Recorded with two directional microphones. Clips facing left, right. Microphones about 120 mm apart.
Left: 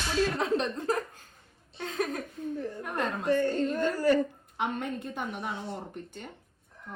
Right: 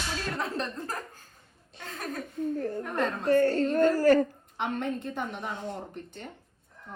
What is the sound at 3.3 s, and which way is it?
Speech, 45° right (ahead or behind).